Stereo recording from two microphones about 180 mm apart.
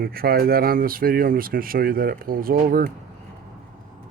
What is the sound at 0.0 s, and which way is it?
Speech, 55° right (ahead or behind).